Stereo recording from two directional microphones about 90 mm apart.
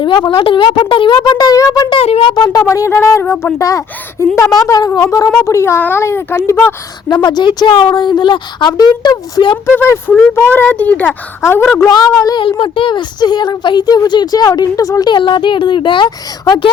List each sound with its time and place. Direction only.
0.3 s a woman's voice: 80° left; by 1.9 s 40° left (ahead or behind)
1.9 s speech: 90° left
2.3 s speech: 50° left (ahead or behind)
5.5 s speech: 30° left (ahead or behind)
7.1 s a woman's voice: 60° left (ahead or behind)
9.6 s speech: 30° left (ahead or behind)
11.9 s speech: 45° left (ahead or behind)
12.4 s speech: 70° left (ahead or behind); by 15.1 s 40° left (ahead or behind)
15.1 s a woman's voice: 65° left (ahead or behind)